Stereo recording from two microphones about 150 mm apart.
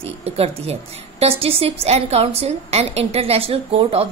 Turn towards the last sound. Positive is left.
turn(degrees=-40)  # may be behind; listen again after turning